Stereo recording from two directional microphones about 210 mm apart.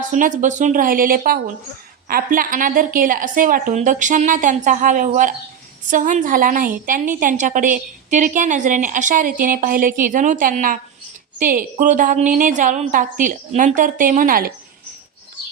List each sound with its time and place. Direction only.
0.1 s a woman's voice: 40° right (ahead or behind)